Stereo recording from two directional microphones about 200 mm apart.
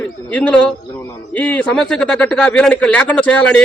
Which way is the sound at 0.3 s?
5° left (ahead or behind).